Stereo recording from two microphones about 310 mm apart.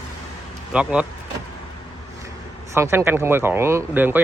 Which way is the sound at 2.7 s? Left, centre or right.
Centre.